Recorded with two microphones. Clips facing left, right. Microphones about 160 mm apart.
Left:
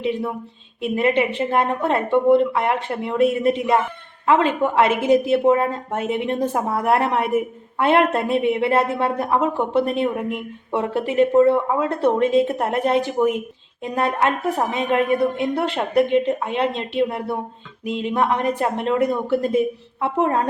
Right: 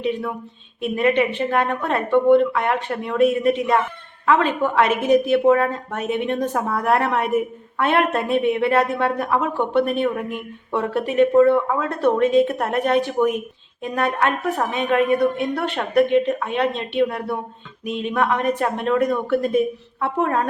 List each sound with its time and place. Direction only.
0.0 s speech: 25° left (ahead or behind)